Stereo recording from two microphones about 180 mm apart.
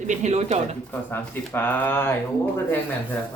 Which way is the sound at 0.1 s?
40° right (ahead or behind).